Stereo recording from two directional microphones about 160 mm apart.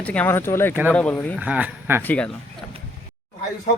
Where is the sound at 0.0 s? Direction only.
10° left (ahead or behind).